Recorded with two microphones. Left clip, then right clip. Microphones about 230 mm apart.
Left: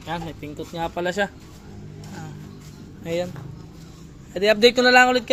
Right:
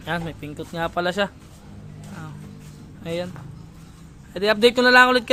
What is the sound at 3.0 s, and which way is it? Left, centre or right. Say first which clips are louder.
Speech: left 2 dB; centre.